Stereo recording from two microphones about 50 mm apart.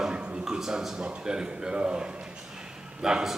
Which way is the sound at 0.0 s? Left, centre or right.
Centre.